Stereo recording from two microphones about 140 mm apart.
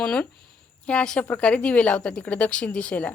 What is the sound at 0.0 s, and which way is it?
Speech, 5° left (ahead or behind).